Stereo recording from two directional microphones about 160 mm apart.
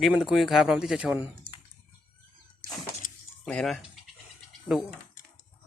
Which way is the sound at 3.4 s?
5° left (ahead or behind).